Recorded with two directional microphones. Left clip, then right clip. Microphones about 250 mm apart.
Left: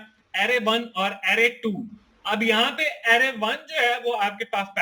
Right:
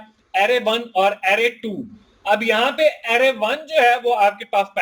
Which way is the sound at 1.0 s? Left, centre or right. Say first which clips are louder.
Right 6 dB; left.